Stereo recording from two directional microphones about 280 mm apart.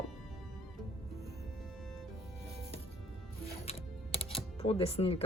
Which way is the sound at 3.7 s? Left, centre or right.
Left.